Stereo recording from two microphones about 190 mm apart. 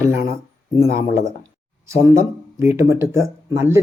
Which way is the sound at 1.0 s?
15° right (ahead or behind).